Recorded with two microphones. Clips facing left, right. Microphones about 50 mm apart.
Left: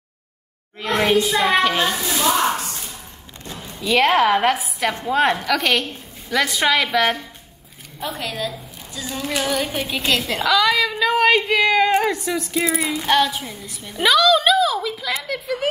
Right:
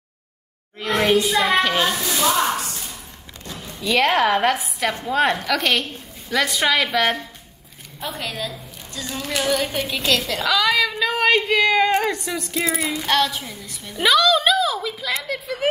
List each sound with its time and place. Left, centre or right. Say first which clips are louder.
1.2 s a woman's voice: left 1 dB; centre
3.8 s a woman's voice: left 2 dB; centre
10.0 s a woman's voice: even; left
10.4 s a woman's voice: left 3 dB; centre